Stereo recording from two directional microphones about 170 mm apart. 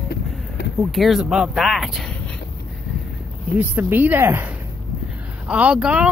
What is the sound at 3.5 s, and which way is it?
Speech, 10° right (ahead or behind).